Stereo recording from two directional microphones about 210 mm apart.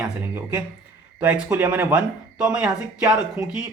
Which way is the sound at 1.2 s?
10° right (ahead or behind).